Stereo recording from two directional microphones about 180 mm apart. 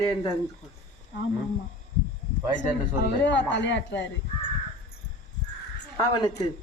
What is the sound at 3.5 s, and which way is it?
Speech, 85° left.